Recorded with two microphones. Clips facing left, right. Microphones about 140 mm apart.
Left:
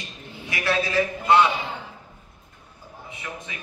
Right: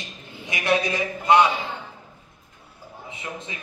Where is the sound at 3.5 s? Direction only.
25° right (ahead or behind).